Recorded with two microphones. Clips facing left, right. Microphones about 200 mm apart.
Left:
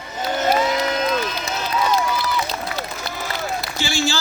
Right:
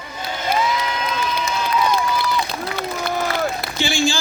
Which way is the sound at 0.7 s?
45° left (ahead or behind).